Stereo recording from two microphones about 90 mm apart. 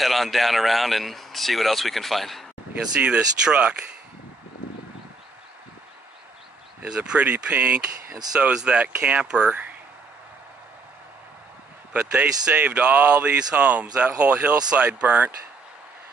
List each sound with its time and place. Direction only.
0.0 s speech: centre (ahead or behind)
3.0 s speech: 10° right (ahead or behind)
6.8 s speech: 10° right (ahead or behind)
11.9 s speech: 15° right (ahead or behind)